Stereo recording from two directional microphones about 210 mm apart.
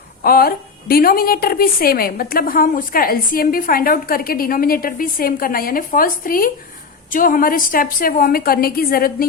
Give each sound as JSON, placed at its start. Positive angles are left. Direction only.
{"t": 0.2, "sound": "a woman's voice", "side_deg": 45}